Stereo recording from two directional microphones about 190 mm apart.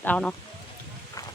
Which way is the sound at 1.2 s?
20° left (ahead or behind).